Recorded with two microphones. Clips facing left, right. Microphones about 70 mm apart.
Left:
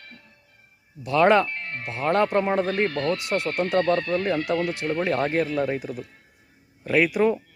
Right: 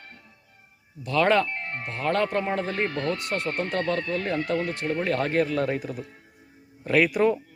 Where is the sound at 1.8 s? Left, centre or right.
Centre.